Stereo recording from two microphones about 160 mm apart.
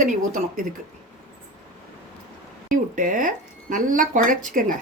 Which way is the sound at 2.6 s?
55° right (ahead or behind).